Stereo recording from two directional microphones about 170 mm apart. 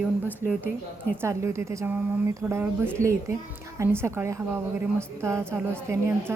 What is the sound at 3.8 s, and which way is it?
A woman's voice, 15° right (ahead or behind).